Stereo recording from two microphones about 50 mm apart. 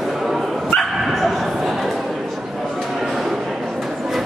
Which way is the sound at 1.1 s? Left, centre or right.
Centre.